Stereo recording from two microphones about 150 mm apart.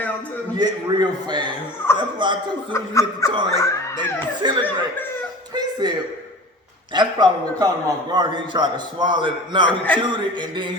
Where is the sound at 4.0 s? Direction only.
30° right (ahead or behind).